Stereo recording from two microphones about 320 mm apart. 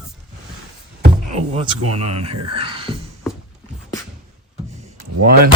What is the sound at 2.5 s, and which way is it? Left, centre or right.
Whispering, centre.